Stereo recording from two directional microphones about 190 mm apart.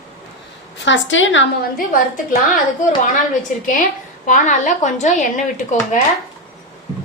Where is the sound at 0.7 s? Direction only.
70° left (ahead or behind).